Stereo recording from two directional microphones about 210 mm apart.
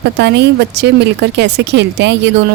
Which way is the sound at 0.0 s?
55° right (ahead or behind).